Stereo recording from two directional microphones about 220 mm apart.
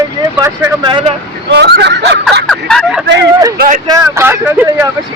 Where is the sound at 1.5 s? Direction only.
50° right (ahead or behind).